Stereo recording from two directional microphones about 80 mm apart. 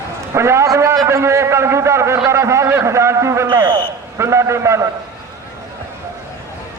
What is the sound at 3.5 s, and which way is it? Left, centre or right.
Speech, right.